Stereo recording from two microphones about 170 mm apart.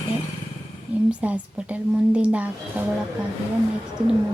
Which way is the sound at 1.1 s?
10° right (ahead or behind).